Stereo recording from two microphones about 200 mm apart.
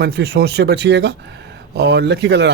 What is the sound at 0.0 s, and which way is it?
Speech, 55° right (ahead or behind).